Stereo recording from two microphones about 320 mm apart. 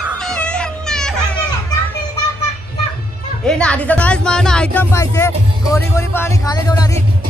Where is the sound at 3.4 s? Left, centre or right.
Centre.